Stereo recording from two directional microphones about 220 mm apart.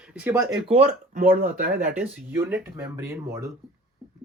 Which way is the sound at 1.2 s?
40° right (ahead or behind).